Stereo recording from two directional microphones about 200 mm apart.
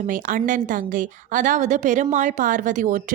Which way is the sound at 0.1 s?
40° right (ahead or behind).